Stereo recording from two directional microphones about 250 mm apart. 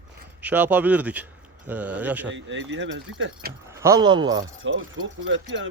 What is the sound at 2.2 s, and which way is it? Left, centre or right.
Speech, right.